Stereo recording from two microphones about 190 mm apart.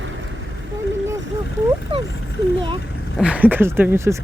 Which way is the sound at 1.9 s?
30° right (ahead or behind).